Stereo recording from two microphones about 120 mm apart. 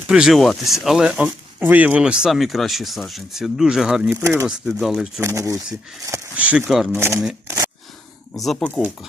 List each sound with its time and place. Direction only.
0.1 s speech: 5° right (ahead or behind)
4.2 s speech: 25° right (ahead or behind)
4.4 s speech: 5° right (ahead or behind)
5.2 s speech: 25° right (ahead or behind)
6.3 s speech: 10° right (ahead or behind)
8.3 s speech: centre (ahead or behind)
8.5 s speech: 10° left (ahead or behind)